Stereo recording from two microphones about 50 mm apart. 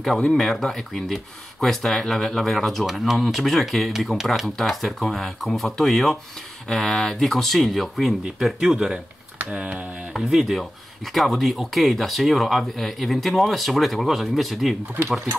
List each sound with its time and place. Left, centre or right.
0.3 s speech: centre
9.4 s speech: right
10.1 s speech: centre